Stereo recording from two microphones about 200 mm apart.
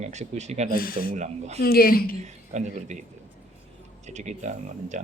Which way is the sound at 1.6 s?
50° left (ahead or behind).